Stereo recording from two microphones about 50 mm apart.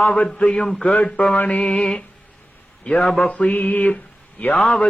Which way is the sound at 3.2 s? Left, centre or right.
Left.